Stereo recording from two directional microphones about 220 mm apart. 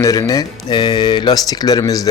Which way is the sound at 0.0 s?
15° left (ahead or behind).